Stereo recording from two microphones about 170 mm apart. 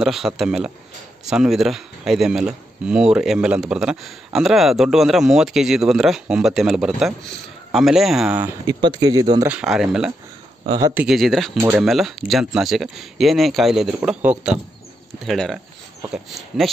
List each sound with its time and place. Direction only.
0.0 s speech: centre (ahead or behind)
8.6 s speech: 25° right (ahead or behind)
9.5 s speech: 5° right (ahead or behind)
11.5 s speech: 15° right (ahead or behind)
11.8 s speech: centre (ahead or behind)